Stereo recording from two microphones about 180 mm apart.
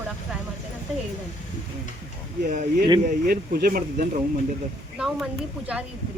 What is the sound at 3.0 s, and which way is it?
Speech, 55° right (ahead or behind).